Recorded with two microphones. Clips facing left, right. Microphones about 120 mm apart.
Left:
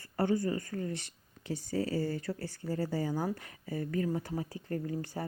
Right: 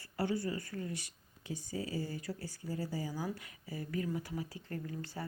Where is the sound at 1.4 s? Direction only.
75° left (ahead or behind).